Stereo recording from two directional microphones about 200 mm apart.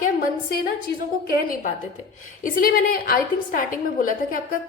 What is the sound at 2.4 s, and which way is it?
A woman's voice, 45° left (ahead or behind).